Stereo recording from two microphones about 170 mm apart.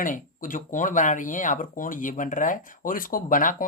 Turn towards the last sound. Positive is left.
turn(degrees=55)  # may be behind; listen again after turning